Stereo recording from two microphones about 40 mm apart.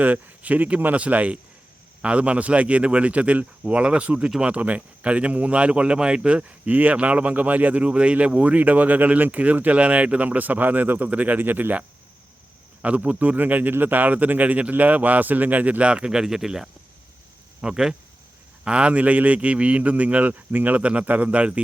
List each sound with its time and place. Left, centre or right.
0.0 s a man's voice: right
6.7 s a man's voice: right
8.5 s speech: right
12.8 s speech: right
15.8 s a man's voice: right